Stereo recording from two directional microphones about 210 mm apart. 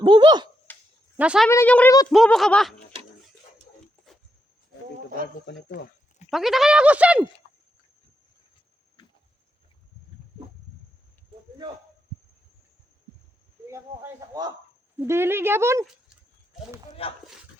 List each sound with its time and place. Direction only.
0.0 s speech: 20° right (ahead or behind)
1.1 s a woman's voice: 5° right (ahead or behind)
1.5 s a woman's voice: 10° left (ahead or behind)
6.3 s speech: centre (ahead or behind)
13.7 s speech: 15° right (ahead or behind)